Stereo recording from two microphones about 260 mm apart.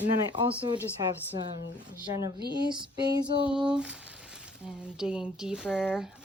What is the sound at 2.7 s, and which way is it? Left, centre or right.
Speech, centre.